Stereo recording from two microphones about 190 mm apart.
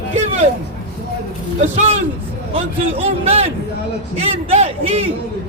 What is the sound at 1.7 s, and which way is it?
A man's voice, 35° right (ahead or behind).